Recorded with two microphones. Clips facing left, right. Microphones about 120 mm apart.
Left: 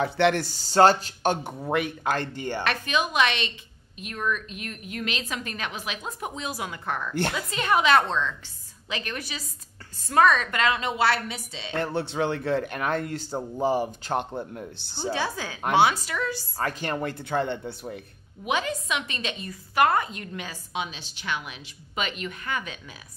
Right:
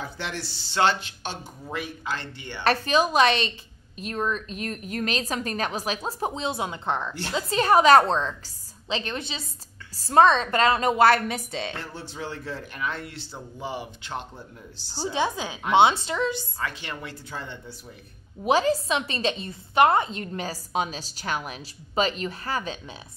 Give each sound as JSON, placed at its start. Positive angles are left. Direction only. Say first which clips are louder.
{"t": 0.0, "sound": "speech", "louder": "left 11 dB", "side_deg": 60}
{"t": 1.3, "sound": "speech", "louder": "left 5 dB", "side_deg": 65}
{"t": 2.6, "sound": "a woman's voice", "louder": "right 6 dB", "side_deg": -35}
{"t": 8.8, "sound": "a woman's voice", "louder": "right 3 dB", "side_deg": -25}
{"t": 11.8, "sound": "a man's voice", "louder": "left 9 dB", "side_deg": 65}
{"t": 14.3, "sound": "a man's voice", "louder": "left 9 dB", "side_deg": 60}
{"t": 15.1, "sound": "a woman's voice", "louder": "right 3 dB", "side_deg": -20}
{"t": 16.5, "sound": "a man's voice", "louder": "left 5 dB", "side_deg": 40}
{"t": 18.4, "sound": "a woman's voice", "louder": "right 6 dB", "side_deg": -35}